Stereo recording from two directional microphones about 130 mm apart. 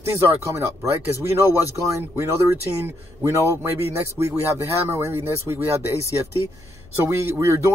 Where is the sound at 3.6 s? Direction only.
20° right (ahead or behind).